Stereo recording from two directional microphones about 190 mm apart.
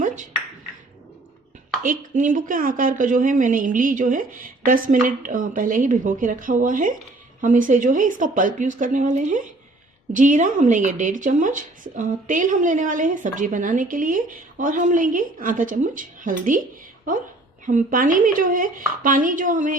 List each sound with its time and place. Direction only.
1.8 s speech: 45° right (ahead or behind)
17.7 s speech: 45° right (ahead or behind)